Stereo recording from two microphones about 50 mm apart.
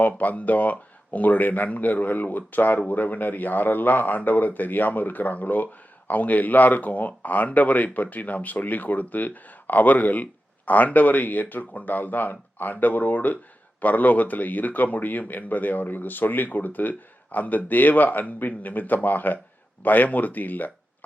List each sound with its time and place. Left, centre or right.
0.2 s speech: left